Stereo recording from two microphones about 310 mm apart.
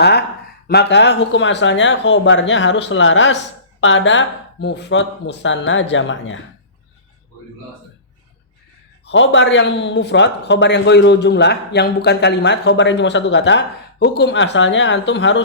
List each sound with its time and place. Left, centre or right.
0.7 s speech: left
9.0 s speech: left